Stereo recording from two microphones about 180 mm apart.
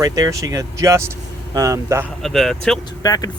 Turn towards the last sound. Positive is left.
turn(degrees=20)  # may be behind; listen again after turning